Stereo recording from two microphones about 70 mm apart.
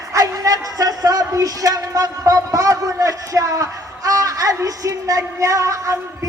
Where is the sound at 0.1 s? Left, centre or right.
Right.